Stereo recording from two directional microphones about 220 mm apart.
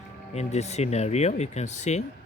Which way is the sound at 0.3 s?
30° left (ahead or behind).